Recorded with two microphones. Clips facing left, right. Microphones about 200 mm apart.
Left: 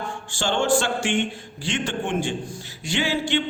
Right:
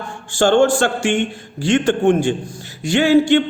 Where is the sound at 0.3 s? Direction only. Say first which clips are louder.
Right 8 dB; 45° right (ahead or behind).